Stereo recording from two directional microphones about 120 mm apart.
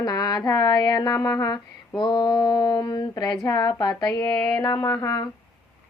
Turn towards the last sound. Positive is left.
turn(degrees=30)  # may be behind; listen again after turning